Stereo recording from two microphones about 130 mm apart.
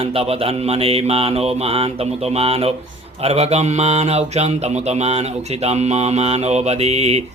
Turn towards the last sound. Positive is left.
turn(degrees=-55)  # may be behind; listen again after turning